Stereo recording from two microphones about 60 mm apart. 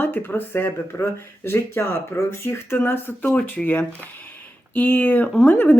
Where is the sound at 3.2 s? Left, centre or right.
Left.